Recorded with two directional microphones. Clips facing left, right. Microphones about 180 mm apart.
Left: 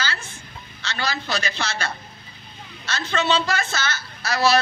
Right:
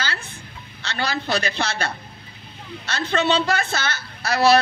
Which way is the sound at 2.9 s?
55° right (ahead or behind).